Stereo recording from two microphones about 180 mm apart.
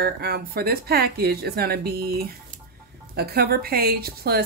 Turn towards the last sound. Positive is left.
turn(degrees=-60)  # may be behind; listen again after turning